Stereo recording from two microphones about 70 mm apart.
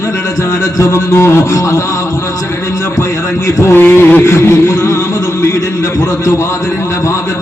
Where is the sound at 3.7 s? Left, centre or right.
Left.